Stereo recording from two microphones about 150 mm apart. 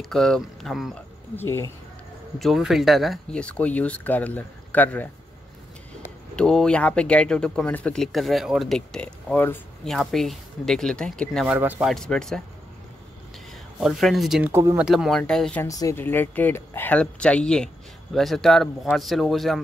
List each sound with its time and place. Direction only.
0.0 s speech: 5° left (ahead or behind)
1.3 s speech: 15° left (ahead or behind)
2.3 s speech: centre (ahead or behind)
6.3 s speech: 5° left (ahead or behind)
11.4 s speech: 10° right (ahead or behind)
11.9 s speech: 5° left (ahead or behind)
13.5 s speech: centre (ahead or behind)
14.4 s speech: 20° right (ahead or behind)
14.8 s speech: 5° right (ahead or behind)
15.6 s speech: 20° left (ahead or behind); by 19.6 s centre (ahead or behind)